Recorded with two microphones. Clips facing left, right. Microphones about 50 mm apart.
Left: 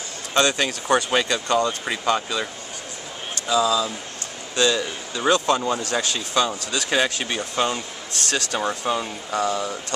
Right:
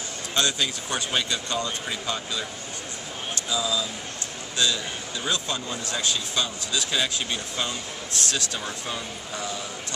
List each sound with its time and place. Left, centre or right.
0.3 s a man's voice: left
3.4 s a man's voice: left